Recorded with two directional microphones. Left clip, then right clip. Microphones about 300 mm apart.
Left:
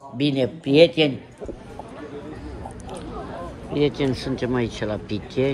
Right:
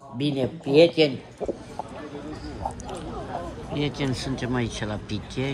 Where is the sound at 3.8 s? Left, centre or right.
Centre.